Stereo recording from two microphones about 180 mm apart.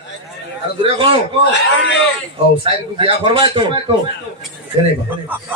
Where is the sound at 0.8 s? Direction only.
30° right (ahead or behind).